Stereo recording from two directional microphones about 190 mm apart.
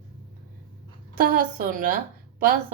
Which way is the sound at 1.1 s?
50° right (ahead or behind).